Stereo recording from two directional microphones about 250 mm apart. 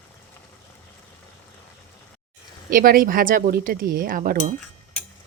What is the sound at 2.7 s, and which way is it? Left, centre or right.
Speech, right.